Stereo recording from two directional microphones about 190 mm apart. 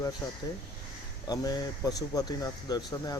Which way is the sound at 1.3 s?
20° left (ahead or behind).